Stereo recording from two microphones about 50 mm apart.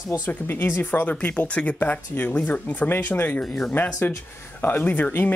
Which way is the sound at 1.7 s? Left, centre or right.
Left.